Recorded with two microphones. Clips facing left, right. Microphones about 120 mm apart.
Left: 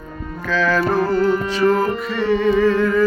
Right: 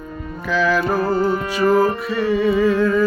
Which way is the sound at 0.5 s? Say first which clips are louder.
Even; 10° right (ahead or behind).